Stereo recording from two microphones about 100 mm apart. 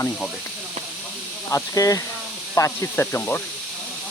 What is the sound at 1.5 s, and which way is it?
Speech, 35° left (ahead or behind).